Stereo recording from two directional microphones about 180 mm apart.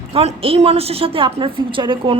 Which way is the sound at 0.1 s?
30° right (ahead or behind).